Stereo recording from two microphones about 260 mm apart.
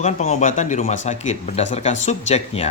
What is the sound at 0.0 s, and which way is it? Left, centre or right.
Speech, left.